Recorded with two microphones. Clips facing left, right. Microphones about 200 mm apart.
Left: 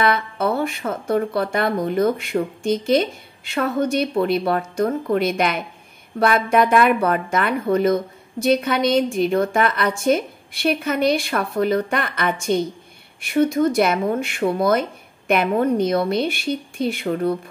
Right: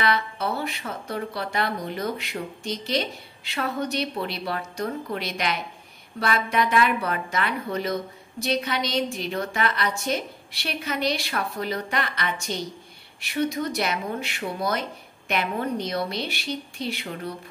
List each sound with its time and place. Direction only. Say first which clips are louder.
0.0 s speech: left 5 dB; 50° left (ahead or behind)